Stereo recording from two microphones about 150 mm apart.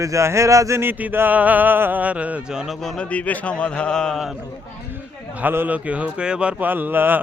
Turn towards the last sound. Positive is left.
turn(degrees=-15)  # may be behind; listen again after turning